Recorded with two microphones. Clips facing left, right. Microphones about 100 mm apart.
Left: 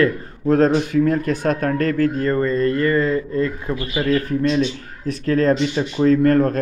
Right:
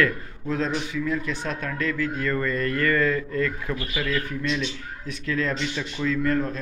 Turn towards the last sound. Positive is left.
turn(degrees=50)  # may be behind; listen again after turning